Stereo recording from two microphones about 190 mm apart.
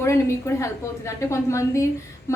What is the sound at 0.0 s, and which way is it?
A woman's voice, 15° left (ahead or behind).